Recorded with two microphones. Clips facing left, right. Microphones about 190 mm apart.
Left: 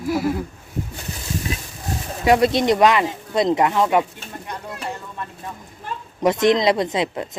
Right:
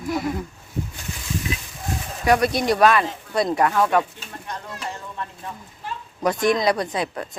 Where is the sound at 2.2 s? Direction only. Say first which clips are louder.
Left 3 dB; 25° left (ahead or behind).